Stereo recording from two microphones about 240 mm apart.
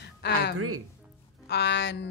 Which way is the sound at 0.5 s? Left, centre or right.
Right.